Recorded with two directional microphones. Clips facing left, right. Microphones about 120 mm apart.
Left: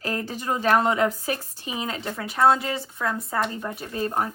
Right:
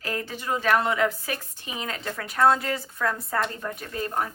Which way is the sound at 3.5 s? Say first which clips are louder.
Left 2 dB; 20° left (ahead or behind).